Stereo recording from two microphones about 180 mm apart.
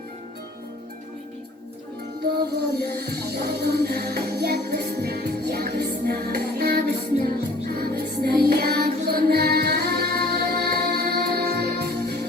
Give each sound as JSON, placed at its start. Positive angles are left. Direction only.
{"t": 2.3, "sound": "music", "side_deg": -60}